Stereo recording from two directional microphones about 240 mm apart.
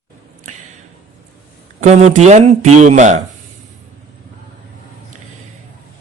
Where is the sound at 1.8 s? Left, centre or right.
Right.